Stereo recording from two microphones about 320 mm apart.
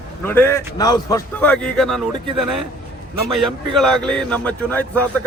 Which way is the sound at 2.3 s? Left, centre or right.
Right.